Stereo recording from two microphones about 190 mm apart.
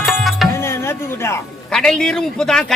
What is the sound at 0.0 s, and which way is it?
Music, centre (ahead or behind).